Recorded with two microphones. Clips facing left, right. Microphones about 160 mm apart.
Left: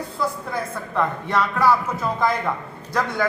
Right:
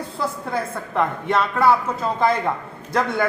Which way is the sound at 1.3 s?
25° right (ahead or behind).